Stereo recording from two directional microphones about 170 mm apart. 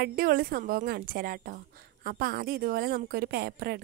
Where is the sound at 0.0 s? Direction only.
65° right (ahead or behind).